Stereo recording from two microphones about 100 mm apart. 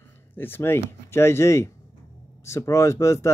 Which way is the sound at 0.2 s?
20° left (ahead or behind).